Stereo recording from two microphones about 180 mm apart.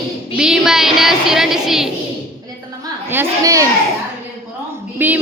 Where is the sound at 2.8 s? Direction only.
15° right (ahead or behind).